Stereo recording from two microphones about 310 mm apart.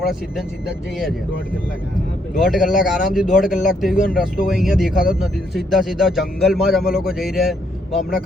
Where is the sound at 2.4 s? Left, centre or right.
Centre.